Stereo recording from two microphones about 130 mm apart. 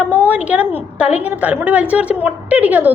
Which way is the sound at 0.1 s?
10° right (ahead or behind).